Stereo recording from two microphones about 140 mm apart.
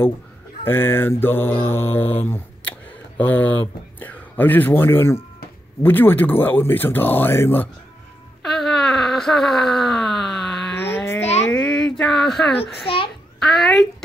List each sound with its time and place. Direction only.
0.7 s mantra: 15° left (ahead or behind)
3.2 s speech: 10° left (ahead or behind)
5.8 s mantra: 15° left (ahead or behind)
8.5 s wail: centre (ahead or behind)
10.8 s a sound: 15° left (ahead or behind)
12.8 s a child's voice: 40° left (ahead or behind)
13.4 s a child's voice: centre (ahead or behind)